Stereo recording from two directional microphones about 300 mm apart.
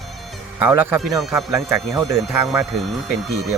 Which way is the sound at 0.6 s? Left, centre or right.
Centre.